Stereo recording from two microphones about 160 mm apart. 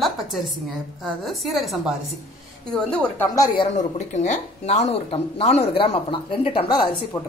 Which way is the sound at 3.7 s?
45° left (ahead or behind).